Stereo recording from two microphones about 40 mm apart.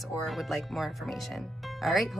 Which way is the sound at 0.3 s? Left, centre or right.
Centre.